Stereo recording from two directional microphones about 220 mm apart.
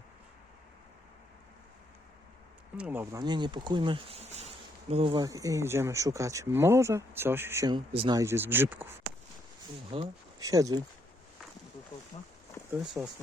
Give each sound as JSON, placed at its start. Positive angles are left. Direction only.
{"t": 2.7, "sound": "speech", "side_deg": -5}
{"t": 9.9, "sound": "speech", "side_deg": -25}
{"t": 10.4, "sound": "speech", "side_deg": -15}
{"t": 12.8, "sound": "speech", "side_deg": -5}